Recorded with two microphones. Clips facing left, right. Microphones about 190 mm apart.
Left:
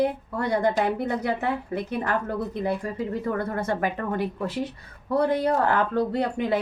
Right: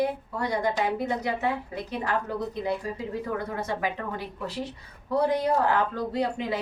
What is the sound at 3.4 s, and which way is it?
Speech, 50° left (ahead or behind).